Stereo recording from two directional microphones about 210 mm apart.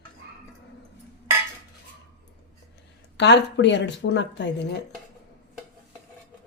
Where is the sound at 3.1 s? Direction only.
55° left (ahead or behind).